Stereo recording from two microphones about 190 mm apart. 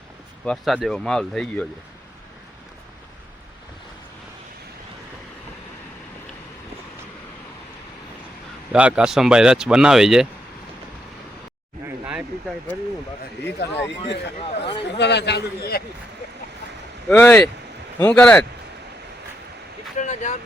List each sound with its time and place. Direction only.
0.4 s speech: centre (ahead or behind)
8.7 s speech: 5° right (ahead or behind)
11.9 s vehicle: 5° right (ahead or behind)
13.6 s a man's voice: 65° left (ahead or behind)
14.5 s speech: 30° left (ahead or behind)
14.8 s a man's voice: 65° left (ahead or behind)
17.1 s speech: 5° left (ahead or behind)
20.0 s vehicle: 40° left (ahead or behind)